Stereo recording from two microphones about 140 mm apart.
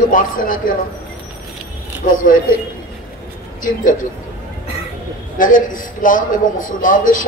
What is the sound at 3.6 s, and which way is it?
Speech, 70° left (ahead or behind).